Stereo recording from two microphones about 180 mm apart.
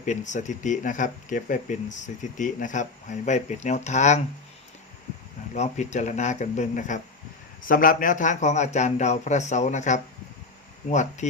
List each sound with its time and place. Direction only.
0.0 s speech: 40° left (ahead or behind)
5.5 s speech: 40° left (ahead or behind)
11.2 s speech: 40° left (ahead or behind)